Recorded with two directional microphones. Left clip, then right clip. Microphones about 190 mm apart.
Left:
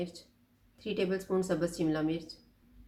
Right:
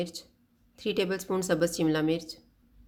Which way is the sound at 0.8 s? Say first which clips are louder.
Right 4 dB; 50° right (ahead or behind).